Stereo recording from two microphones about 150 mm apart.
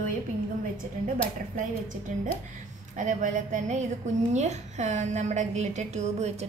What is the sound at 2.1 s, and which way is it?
A woman's voice, 55° right (ahead or behind).